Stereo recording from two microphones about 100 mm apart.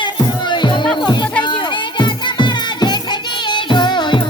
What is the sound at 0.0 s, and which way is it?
Music, 50° left (ahead or behind).